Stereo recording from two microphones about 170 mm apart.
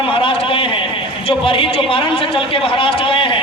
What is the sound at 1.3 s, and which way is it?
A man's voice, 30° left (ahead or behind).